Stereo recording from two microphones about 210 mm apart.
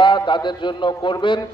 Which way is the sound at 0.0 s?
20° left (ahead or behind).